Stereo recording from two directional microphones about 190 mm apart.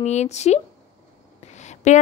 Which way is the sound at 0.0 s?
35° left (ahead or behind).